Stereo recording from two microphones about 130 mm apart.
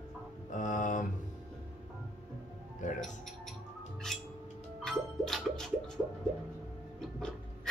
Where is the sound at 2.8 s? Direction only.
75° left (ahead or behind).